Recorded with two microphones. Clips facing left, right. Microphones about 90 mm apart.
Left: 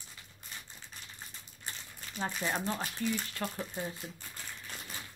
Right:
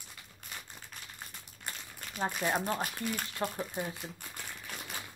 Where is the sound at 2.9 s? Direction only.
50° right (ahead or behind).